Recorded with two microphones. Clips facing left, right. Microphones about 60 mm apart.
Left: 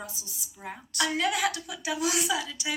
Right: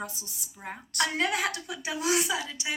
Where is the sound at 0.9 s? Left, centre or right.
Right.